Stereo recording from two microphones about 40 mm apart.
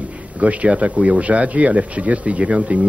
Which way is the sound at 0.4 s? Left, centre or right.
Right.